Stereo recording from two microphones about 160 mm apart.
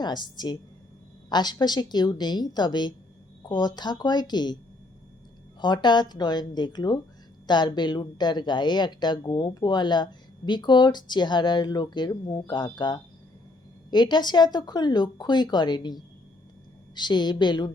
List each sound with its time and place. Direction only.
0.0 s speech: 25° left (ahead or behind)
5.5 s speech: 30° left (ahead or behind)